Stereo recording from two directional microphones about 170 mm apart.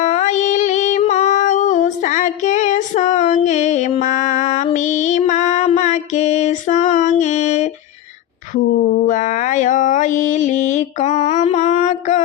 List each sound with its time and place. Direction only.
0.0 s music: 45° left (ahead or behind)
8.8 s mantra: 50° left (ahead or behind)